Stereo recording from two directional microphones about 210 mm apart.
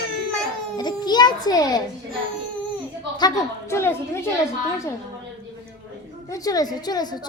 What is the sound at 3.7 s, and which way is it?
Speech, 10° left (ahead or behind).